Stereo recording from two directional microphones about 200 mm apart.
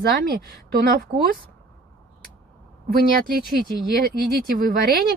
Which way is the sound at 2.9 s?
50° right (ahead or behind).